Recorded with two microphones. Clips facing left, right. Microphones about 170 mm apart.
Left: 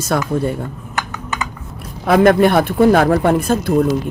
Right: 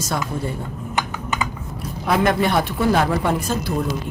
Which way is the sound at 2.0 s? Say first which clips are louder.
Left 8 dB; 55° left (ahead or behind).